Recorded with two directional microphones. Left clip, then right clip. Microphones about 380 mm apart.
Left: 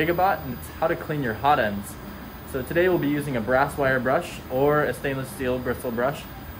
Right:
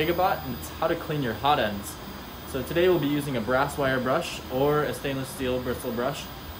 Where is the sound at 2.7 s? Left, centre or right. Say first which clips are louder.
Left 1 dB; centre.